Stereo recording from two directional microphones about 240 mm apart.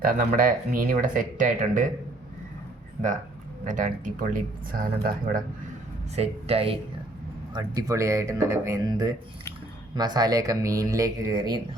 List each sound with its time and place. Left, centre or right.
0.0 s speech: right
3.7 s speech: right
6.1 s speech: right